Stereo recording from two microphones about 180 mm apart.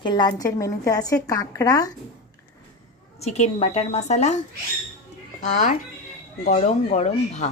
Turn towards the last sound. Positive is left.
turn(degrees=40)  # may be behind; listen again after turning